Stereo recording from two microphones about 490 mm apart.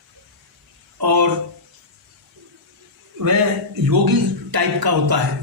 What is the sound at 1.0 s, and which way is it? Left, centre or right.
Speech, right.